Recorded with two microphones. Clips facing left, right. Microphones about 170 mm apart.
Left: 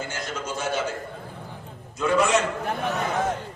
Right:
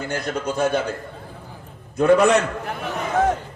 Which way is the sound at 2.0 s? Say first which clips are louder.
Right 6 dB; 55° right (ahead or behind).